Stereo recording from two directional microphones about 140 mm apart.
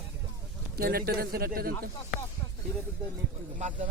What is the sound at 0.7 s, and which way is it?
Speech, 90° right.